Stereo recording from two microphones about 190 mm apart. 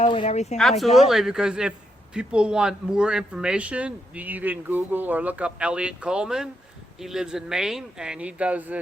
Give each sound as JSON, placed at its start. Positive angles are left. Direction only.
{"t": 0.0, "sound": "speech", "side_deg": 30}
{"t": 0.8, "sound": "speech", "side_deg": 0}